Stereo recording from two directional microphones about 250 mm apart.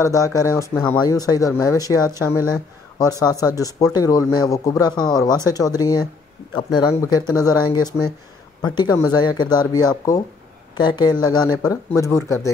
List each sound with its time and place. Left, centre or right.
0.0 s speech: centre